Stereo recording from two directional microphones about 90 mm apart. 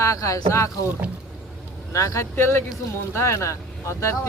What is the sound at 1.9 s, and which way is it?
Speech, 35° left (ahead or behind).